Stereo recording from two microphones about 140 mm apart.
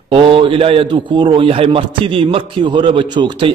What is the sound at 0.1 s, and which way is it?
A man's voice, 40° right (ahead or behind).